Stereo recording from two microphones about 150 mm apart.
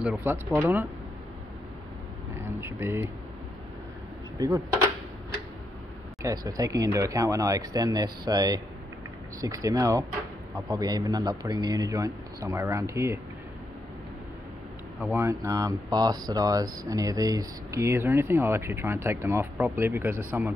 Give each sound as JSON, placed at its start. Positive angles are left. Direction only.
{"t": 0.2, "sound": "speech", "side_deg": -15}
{"t": 2.3, "sound": "a sound", "side_deg": -15}
{"t": 4.4, "sound": "speech", "side_deg": -25}
{"t": 6.2, "sound": "speech", "side_deg": -25}
{"t": 15.0, "sound": "speech", "side_deg": -15}